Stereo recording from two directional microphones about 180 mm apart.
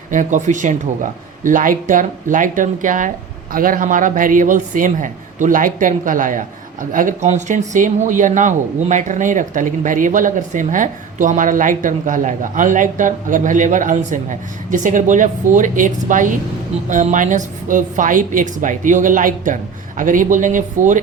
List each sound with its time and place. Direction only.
0.1 s speech: 45° right (ahead or behind)